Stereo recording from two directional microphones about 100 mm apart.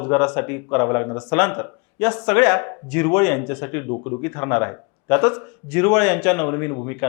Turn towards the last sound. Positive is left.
turn(degrees=20)  # may be behind; listen again after turning